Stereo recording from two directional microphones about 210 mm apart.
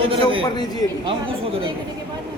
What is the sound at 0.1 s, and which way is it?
Speech, 25° right (ahead or behind).